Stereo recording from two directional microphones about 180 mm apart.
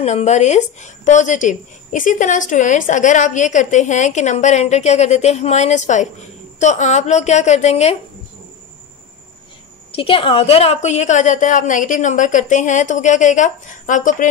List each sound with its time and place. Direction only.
0.0 s speech: 40° left (ahead or behind)
9.9 s a woman's voice: 30° left (ahead or behind)